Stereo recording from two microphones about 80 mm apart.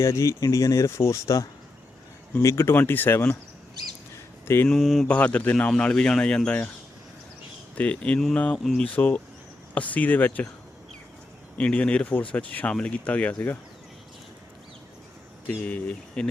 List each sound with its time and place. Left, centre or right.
0.0 s speech: left
4.4 s mantra: left
4.7 s speech: centre
5.0 s speech: centre
7.8 s speech: centre
8.5 s speech: centre
9.0 s speech: left
11.5 s speech: centre
15.4 s speech: centre